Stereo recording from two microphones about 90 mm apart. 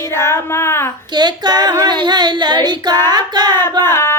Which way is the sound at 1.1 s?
50° right (ahead or behind).